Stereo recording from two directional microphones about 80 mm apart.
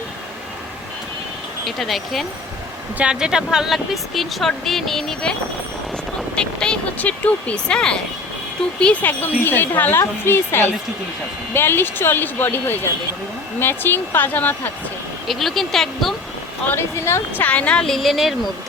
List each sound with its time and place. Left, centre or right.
1.6 s speech: centre
3.0 s speech: centre
6.3 s speech: centre
15.3 s speech: centre
16.6 s speech: left; by 18.3 s centre